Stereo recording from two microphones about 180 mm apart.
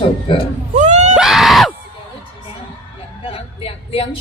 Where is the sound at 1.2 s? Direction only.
Centre (ahead or behind).